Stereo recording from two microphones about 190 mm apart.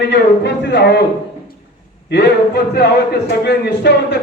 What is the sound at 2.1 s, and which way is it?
A man's voice, 60° left (ahead or behind).